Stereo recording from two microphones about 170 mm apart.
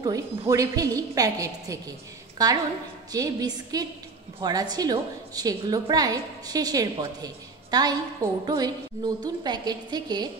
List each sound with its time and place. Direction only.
0.0 s a woman's voice: 20° right (ahead or behind)